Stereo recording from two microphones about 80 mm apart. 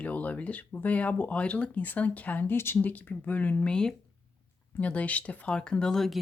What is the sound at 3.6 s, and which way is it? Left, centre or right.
Speech, centre.